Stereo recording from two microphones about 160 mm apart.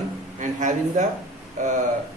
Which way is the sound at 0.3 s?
50° right (ahead or behind).